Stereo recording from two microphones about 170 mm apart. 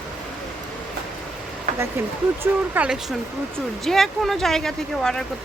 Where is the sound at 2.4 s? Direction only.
10° right (ahead or behind).